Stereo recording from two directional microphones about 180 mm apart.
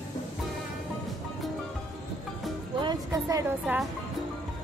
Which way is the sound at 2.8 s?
20° right (ahead or behind).